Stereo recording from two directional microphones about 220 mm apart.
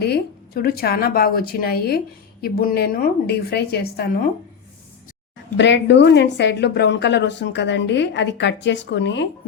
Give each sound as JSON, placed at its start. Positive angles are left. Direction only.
{"t": 0.0, "sound": "a woman's voice", "side_deg": 45}
{"t": 5.5, "sound": "a woman's voice", "side_deg": 55}